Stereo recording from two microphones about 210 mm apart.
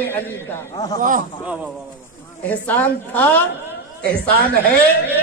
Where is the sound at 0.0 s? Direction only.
10° left (ahead or behind).